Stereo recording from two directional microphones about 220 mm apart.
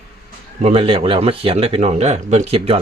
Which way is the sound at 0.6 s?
25° right (ahead or behind).